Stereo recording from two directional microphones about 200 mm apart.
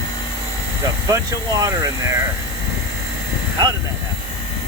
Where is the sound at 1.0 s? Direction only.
15° right (ahead or behind).